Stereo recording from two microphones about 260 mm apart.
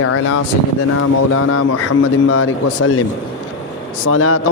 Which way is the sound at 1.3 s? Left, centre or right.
Left.